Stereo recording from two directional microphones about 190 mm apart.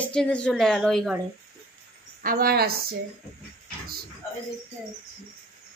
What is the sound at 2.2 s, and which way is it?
Speech, 50° right (ahead or behind).